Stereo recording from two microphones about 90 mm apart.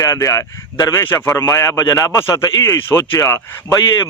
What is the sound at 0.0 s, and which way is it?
A man's voice, 35° left (ahead or behind).